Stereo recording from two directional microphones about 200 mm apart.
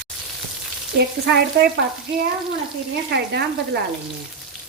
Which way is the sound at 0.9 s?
55° right (ahead or behind).